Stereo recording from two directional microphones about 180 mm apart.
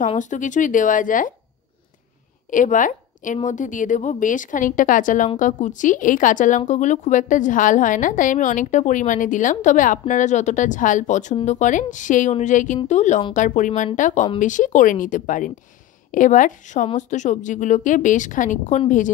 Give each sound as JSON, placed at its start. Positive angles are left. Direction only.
{"t": 0.0, "sound": "a woman's voice", "side_deg": 45}
{"t": 2.5, "sound": "a woman's voice", "side_deg": 45}